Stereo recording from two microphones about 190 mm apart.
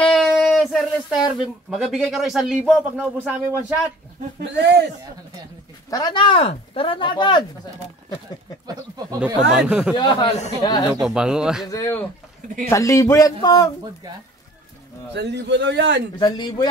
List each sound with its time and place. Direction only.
0.0 s a sound: centre (ahead or behind)
0.4 s speech: centre (ahead or behind)
4.4 s a man's voice: 65° right (ahead or behind)
5.9 s speech: 20° left (ahead or behind)
8.6 s speech: 20° right (ahead or behind)
9.2 s speech: 5° right (ahead or behind)
9.9 s speech: 25° left (ahead or behind)
10.9 s speech: 5° right (ahead or behind)
11.6 s speech: 15° left (ahead or behind)
15.1 s a man's voice: 65° right (ahead or behind)
16.2 s speech: 25° left (ahead or behind)